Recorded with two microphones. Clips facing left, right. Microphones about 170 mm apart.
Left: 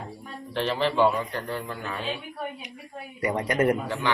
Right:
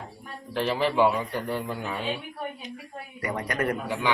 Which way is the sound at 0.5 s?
5° right (ahead or behind).